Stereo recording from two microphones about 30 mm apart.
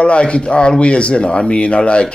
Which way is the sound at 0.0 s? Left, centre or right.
Left.